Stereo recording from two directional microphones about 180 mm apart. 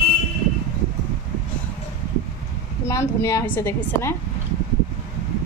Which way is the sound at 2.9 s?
15° left (ahead or behind).